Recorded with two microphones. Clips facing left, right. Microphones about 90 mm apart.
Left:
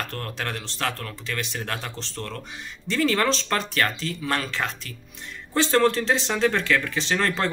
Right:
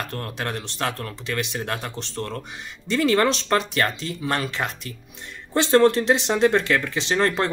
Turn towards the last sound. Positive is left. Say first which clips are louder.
# right 3 dB
turn(degrees=-20)  # may be behind; listen again after turning